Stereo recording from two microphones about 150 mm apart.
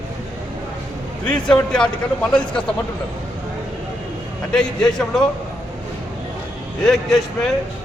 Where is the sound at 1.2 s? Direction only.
5° left (ahead or behind).